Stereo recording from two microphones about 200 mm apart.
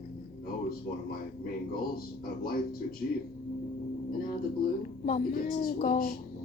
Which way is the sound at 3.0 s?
50° left (ahead or behind).